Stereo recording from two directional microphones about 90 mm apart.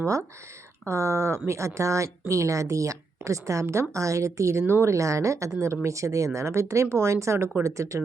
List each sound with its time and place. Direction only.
0.0 s speech: 35° right (ahead or behind)